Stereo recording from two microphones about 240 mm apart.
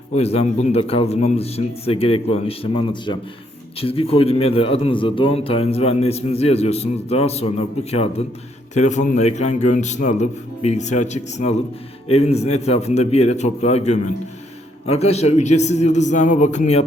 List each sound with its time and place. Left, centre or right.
0.1 s a man's voice: left